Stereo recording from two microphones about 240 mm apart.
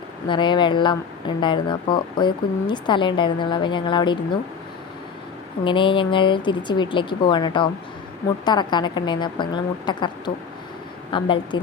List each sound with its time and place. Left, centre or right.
0.3 s speech: centre
5.6 s speech: centre